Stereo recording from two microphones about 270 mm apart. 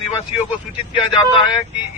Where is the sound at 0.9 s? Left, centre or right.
Centre.